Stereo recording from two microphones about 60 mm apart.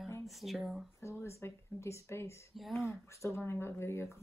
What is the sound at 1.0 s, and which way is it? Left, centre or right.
Speech, left.